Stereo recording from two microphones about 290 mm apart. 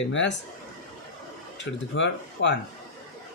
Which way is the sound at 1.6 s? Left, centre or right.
Left.